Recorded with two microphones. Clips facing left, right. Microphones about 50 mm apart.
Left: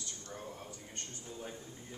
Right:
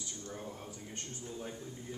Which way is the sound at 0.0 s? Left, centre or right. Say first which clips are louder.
Right 2 dB; centre.